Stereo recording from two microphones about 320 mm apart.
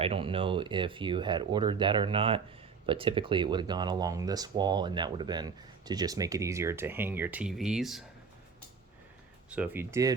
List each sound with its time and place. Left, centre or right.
0.0 s speech: centre
9.5 s speech: centre